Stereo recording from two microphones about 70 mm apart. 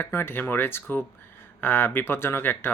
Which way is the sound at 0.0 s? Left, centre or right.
Left.